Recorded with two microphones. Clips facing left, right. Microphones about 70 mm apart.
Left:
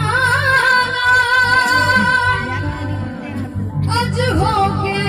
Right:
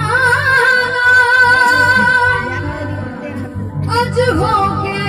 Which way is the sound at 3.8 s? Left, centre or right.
Right.